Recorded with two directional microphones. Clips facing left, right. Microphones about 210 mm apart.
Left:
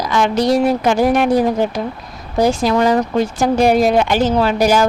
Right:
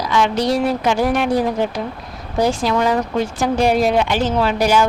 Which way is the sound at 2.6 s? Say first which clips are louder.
Left 3 dB; 40° left (ahead or behind).